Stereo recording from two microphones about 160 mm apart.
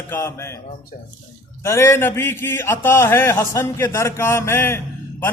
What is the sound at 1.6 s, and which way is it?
A man's voice, 15° left (ahead or behind).